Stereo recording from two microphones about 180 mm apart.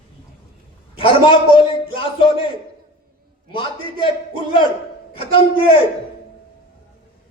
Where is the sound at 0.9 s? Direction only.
30° left (ahead or behind).